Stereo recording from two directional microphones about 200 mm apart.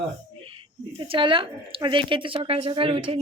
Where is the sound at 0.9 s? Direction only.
25° right (ahead or behind).